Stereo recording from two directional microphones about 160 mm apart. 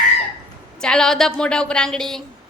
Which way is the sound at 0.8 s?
5° left (ahead or behind).